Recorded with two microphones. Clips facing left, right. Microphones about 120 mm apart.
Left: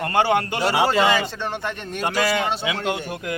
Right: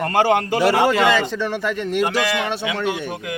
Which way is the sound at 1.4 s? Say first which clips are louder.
Right 5 dB; 90° right.